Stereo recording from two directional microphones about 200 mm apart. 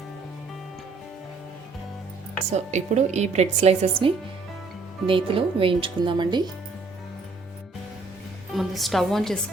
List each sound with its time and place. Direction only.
2.5 s a woman's voice: 35° right (ahead or behind)
8.5 s a woman's voice: centre (ahead or behind)